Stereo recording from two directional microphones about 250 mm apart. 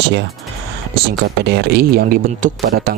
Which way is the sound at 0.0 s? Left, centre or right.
Right.